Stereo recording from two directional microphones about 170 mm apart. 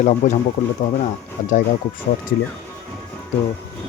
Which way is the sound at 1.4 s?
55° left (ahead or behind).